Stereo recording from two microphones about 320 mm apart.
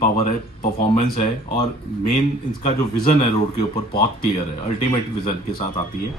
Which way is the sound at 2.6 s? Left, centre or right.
Left.